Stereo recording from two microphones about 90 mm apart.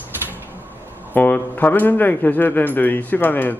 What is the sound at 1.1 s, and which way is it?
Speech, 20° left (ahead or behind).